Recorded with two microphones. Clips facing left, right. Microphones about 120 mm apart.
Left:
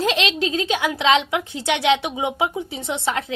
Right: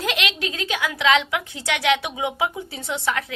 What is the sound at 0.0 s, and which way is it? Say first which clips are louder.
A woman's voice: left 5 dB; 25° left (ahead or behind).